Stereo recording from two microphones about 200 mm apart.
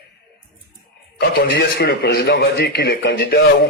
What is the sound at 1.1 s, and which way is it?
A man's voice, 55° left (ahead or behind).